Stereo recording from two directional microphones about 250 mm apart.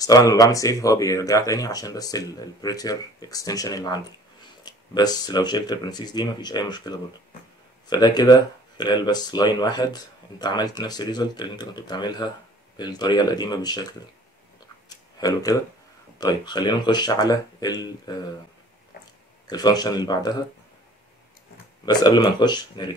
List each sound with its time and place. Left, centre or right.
0.3 s speech: centre
14.9 s a sound: centre
16.2 s speech: centre
19.4 s speech: centre
21.8 s speech: centre